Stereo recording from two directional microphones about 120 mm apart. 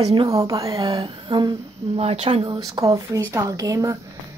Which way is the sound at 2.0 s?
60° right (ahead or behind).